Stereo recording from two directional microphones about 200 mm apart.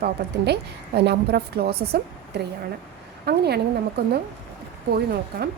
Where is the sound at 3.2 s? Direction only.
55° right (ahead or behind).